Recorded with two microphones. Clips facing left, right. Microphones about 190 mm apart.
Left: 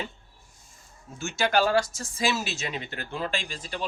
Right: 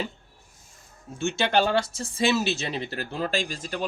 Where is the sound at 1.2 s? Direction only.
30° right (ahead or behind).